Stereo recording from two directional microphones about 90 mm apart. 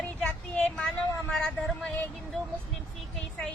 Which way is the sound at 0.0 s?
10° left (ahead or behind).